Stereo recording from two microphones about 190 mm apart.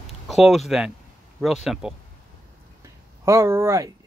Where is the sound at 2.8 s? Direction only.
15° right (ahead or behind).